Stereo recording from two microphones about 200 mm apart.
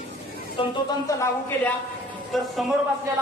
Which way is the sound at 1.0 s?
10° left (ahead or behind).